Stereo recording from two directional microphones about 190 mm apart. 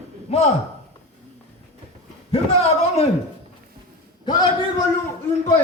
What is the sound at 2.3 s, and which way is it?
Speech, 35° left (ahead or behind).